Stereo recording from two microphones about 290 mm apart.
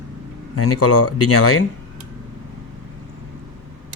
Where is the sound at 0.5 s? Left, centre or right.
Left.